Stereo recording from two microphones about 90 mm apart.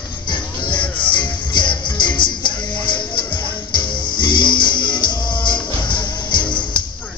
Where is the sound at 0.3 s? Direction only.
60° left (ahead or behind).